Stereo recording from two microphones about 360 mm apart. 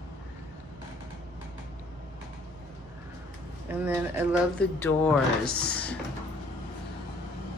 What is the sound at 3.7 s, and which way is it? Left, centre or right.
Speech, centre.